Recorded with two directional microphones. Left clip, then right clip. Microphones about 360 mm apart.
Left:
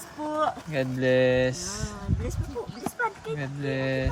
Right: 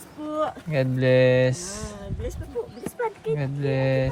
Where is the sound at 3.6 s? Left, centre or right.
Centre.